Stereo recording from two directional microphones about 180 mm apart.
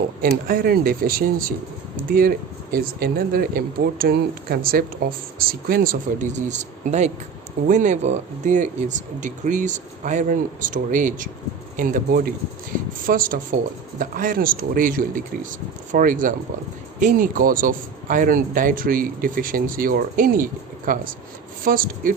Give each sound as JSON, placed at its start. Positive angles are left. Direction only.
{"t": 0.2, "sound": "a man's voice", "side_deg": -50}